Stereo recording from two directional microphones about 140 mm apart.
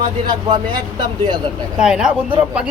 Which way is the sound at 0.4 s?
35° right (ahead or behind).